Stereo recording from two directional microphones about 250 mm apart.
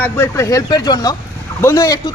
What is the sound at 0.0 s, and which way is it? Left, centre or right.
Speech, centre.